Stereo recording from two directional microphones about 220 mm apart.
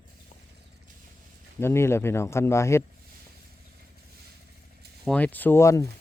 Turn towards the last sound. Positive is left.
turn(degrees=15)  # may be behind; listen again after turning